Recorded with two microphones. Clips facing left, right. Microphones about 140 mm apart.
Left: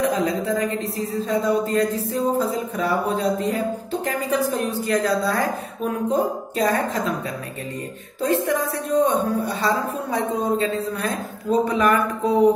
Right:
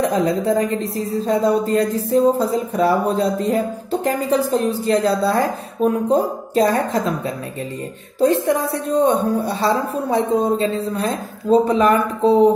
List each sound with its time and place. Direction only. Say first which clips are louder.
0.1 s a woman's voice: right 4 dB; 35° right (ahead or behind)
8.2 s a woman's voice: right 5 dB; 35° right (ahead or behind)